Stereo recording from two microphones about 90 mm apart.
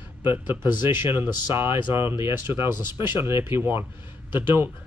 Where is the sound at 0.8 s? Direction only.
25° right (ahead or behind).